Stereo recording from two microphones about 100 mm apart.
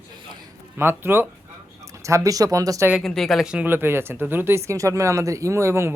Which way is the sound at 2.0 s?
35° right (ahead or behind).